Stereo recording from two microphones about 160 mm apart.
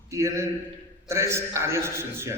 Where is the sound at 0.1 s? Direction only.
20° right (ahead or behind).